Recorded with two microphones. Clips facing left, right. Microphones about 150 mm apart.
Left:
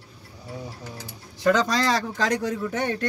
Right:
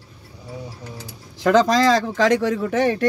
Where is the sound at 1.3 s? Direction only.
90° right.